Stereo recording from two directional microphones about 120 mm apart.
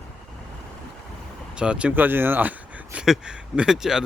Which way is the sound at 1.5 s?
10° right (ahead or behind).